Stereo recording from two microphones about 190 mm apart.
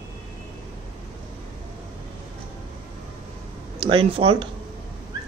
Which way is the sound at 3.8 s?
30° right (ahead or behind).